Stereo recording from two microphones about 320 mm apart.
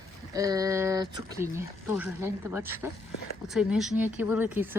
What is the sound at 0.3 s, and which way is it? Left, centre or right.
Speech, centre.